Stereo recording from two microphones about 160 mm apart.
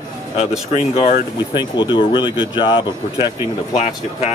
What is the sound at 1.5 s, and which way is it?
Speech, 30° left (ahead or behind).